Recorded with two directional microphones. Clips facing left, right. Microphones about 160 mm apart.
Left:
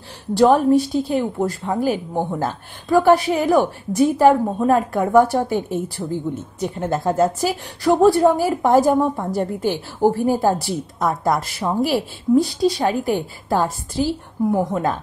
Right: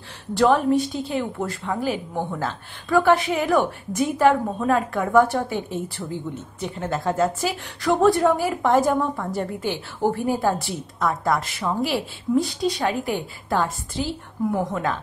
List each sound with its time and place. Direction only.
0.3 s a woman's voice: 35° left (ahead or behind)